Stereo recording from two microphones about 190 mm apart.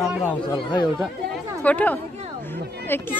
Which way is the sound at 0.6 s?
25° left (ahead or behind).